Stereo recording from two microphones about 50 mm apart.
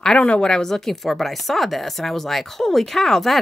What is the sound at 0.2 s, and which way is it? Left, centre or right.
Speech, left.